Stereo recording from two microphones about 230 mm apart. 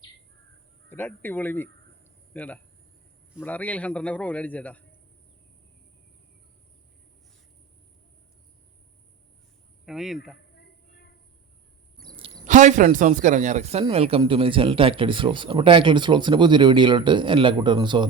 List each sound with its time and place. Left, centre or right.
0.9 s a man's voice: centre
9.8 s speech: centre
12.1 s a man's voice: right